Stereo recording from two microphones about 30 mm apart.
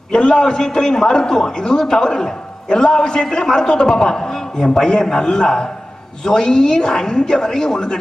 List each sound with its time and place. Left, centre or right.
0.1 s a man's voice: left